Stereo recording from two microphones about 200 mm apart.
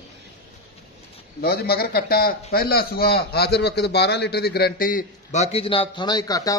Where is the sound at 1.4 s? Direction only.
50° left (ahead or behind); by 6.5 s 20° left (ahead or behind).